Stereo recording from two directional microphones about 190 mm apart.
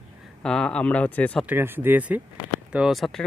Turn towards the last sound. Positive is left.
turn(degrees=0)  # may be behind; listen again after turning